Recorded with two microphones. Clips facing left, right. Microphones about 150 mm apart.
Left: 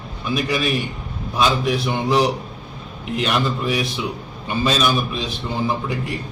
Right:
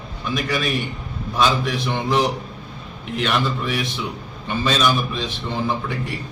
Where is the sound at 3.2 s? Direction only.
10° left (ahead or behind).